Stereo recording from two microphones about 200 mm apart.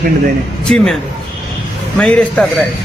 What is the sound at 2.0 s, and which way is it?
Speech, 5° left (ahead or behind).